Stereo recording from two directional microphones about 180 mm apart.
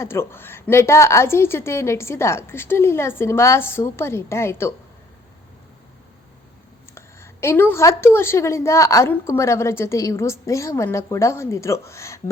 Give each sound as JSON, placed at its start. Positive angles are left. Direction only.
{"t": 0.0, "sound": "a woman's voice", "side_deg": 15}
{"t": 6.9, "sound": "a woman's voice", "side_deg": 15}